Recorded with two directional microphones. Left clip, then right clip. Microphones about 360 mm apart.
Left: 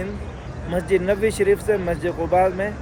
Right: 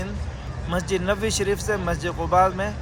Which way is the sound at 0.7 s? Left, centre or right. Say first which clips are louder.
Left 4 dB; centre.